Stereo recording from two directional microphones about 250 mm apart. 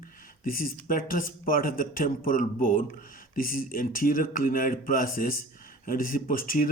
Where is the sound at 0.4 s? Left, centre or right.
Left.